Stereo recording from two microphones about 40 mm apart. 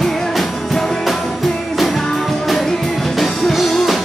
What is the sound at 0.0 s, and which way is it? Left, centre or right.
Music, centre.